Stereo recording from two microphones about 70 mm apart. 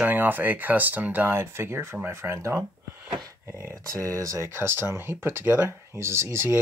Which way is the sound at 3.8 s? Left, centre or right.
Right.